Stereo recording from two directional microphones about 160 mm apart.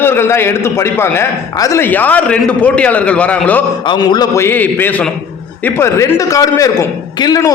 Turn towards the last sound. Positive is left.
turn(degrees=20)  # may be behind; listen again after turning